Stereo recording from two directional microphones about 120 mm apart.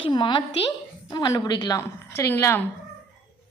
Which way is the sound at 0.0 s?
40° left (ahead or behind).